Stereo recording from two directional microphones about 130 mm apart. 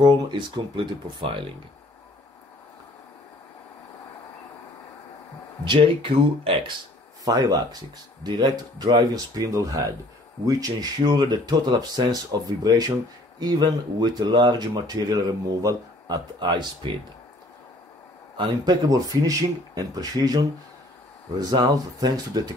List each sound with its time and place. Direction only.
0.0 s speech: 35° right (ahead or behind)
5.7 s speech: 45° right (ahead or behind)
7.2 s speech: 30° right (ahead or behind)
18.4 s speech: 30° right (ahead or behind)